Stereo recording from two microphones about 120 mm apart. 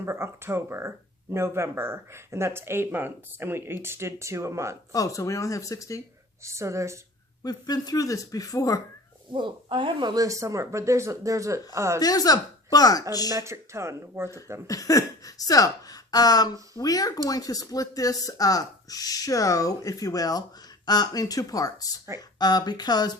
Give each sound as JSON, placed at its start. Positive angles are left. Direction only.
{"t": 0.0, "sound": "speech", "side_deg": -20}
{"t": 4.9, "sound": "speech", "side_deg": 30}
{"t": 6.4, "sound": "speech", "side_deg": -25}
{"t": 7.4, "sound": "speech", "side_deg": 35}
{"t": 9.3, "sound": "speech", "side_deg": -45}
{"t": 11.9, "sound": "speech", "side_deg": 30}
{"t": 13.3, "sound": "speech", "side_deg": -25}
{"t": 14.7, "sound": "speech", "side_deg": 30}